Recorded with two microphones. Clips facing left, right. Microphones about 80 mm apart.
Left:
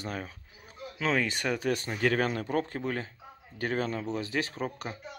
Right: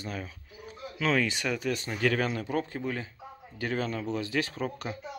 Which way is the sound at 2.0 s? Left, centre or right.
Left.